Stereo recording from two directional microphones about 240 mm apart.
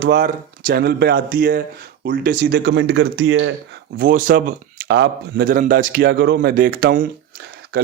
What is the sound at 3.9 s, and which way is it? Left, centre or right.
Speech, right.